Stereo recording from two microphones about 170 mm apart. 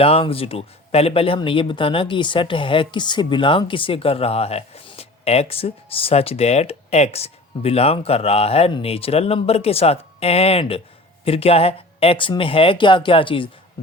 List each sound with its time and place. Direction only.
0.0 s speech: 35° left (ahead or behind)